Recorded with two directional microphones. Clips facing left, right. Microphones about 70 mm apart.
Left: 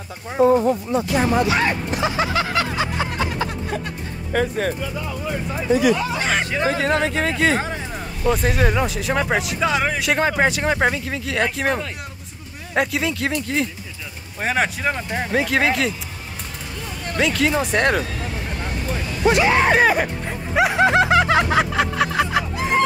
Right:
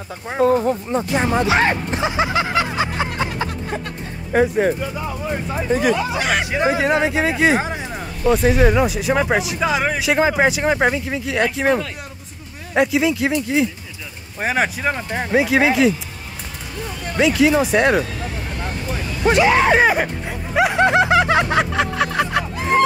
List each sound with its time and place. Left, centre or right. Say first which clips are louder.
0.3 s speech: left 1 dB; right
0.6 s speech: even; right
1.1 s speech: right 1 dB; right
1.6 s music: right 2 dB; right
4.3 s speech: right 5 dB; right
5.7 s speech: left 1 dB; right
5.9 s speech: right 2 dB; centre
8.2 s speech: right 4 dB; centre
17.2 s speech: right 5 dB; centre
19.8 s speech: right 1 dB; centre
20.2 s snicker: right 1 dB; centre